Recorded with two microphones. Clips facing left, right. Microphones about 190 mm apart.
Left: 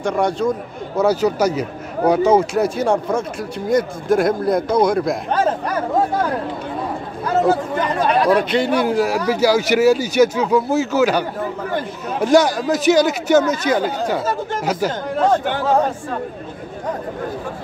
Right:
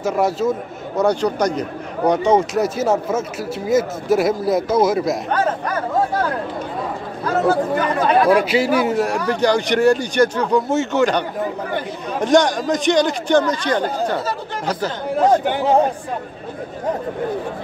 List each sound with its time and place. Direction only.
0.0 s a man's voice: 5° right (ahead or behind)
8.3 s a man's voice: 5° right (ahead or behind); by 14.2 s 10° left (ahead or behind)
15.1 s speech: 10° right (ahead or behind)